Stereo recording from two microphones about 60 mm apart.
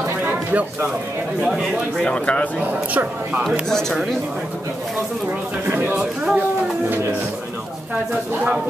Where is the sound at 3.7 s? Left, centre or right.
Centre.